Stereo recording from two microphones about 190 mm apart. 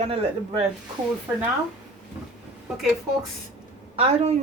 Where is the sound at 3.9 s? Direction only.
35° right (ahead or behind).